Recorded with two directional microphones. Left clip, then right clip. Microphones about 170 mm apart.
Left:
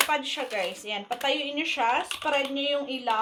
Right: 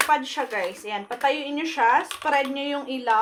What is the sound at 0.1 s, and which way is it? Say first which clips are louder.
A woman's voice: right 5 dB; 25° right (ahead or behind).